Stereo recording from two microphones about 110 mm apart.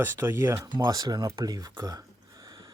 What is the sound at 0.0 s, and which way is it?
Speech, 20° right (ahead or behind).